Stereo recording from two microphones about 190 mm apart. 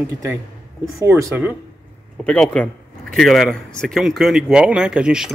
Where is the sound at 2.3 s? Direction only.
5° left (ahead or behind).